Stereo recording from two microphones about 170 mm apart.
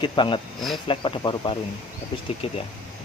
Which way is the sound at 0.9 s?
30° left (ahead or behind).